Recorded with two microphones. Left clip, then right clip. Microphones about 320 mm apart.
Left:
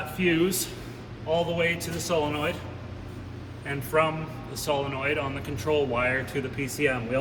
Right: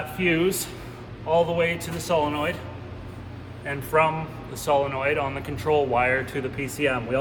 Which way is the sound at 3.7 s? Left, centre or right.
Centre.